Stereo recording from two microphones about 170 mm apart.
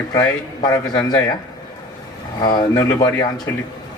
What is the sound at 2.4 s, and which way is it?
Speech, 20° left (ahead or behind).